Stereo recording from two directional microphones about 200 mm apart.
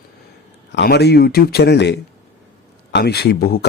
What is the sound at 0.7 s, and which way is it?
Speech, 55° left (ahead or behind).